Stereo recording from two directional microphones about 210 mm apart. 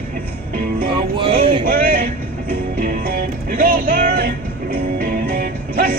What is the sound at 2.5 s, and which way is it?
Music, 45° right (ahead or behind).